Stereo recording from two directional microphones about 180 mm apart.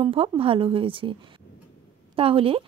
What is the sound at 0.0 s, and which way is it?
Speech, 30° right (ahead or behind).